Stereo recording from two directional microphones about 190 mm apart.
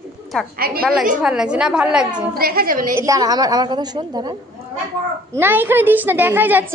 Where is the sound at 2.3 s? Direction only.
50° right (ahead or behind).